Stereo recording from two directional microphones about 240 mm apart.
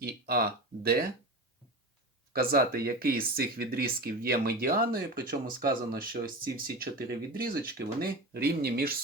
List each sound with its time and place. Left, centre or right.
0.0 s speech: right
2.3 s speech: right